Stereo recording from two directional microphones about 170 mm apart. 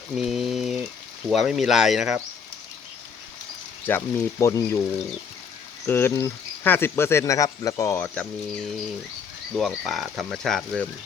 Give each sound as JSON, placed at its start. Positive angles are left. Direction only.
{"t": 0.2, "sound": "speech", "side_deg": 0}
{"t": 3.8, "sound": "speech", "side_deg": 10}
{"t": 5.8, "sound": "speech", "side_deg": 15}